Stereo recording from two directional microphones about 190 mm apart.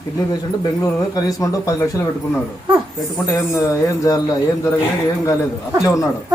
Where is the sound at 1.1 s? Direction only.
20° left (ahead or behind).